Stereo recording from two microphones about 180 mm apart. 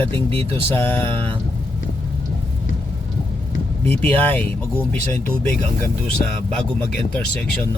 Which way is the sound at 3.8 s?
10° left (ahead or behind).